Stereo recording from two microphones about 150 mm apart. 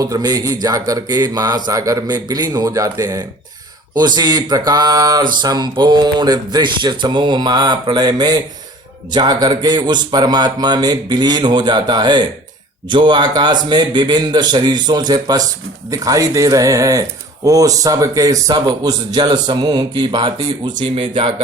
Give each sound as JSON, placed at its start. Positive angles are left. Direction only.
{"t": 0.0, "sound": "speech", "side_deg": -25}